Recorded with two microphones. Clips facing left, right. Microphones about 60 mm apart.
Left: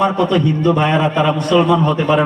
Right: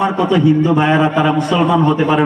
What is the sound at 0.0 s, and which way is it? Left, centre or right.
A man's voice, centre.